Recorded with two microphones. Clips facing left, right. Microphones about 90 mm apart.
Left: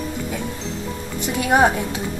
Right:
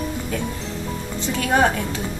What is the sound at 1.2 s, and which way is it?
Speech, 15° left (ahead or behind).